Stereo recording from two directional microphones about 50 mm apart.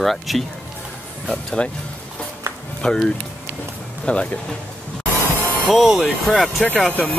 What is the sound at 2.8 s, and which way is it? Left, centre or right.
Speech, centre.